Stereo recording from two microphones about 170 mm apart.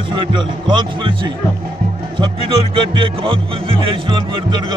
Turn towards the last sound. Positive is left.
turn(degrees=-30)  # may be behind; listen again after turning